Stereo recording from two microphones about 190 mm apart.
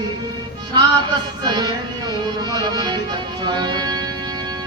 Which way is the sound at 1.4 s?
25° right (ahead or behind).